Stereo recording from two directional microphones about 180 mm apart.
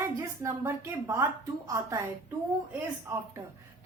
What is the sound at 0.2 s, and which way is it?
A woman's voice, 15° right (ahead or behind).